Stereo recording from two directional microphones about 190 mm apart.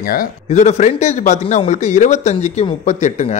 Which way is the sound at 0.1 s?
45° left (ahead or behind).